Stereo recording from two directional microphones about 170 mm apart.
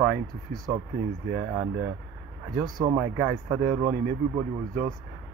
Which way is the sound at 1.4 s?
15° right (ahead or behind).